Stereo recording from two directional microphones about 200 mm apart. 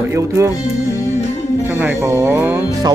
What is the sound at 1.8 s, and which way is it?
Speech, 10° right (ahead or behind).